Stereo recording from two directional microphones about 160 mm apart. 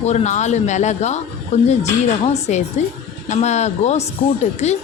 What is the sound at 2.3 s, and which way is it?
Speech, 45° left (ahead or behind).